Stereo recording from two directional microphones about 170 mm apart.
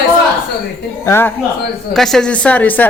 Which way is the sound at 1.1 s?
15° left (ahead or behind).